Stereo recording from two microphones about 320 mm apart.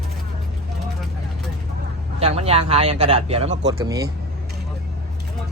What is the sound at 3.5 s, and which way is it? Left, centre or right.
Speech, right.